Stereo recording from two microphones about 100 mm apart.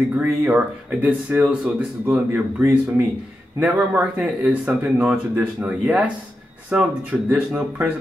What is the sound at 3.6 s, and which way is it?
Speech, 10° right (ahead or behind).